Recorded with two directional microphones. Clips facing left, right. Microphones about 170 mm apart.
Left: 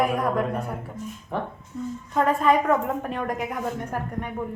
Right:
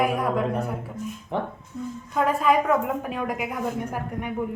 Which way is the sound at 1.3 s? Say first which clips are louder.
Right 1 dB; 20° right (ahead or behind).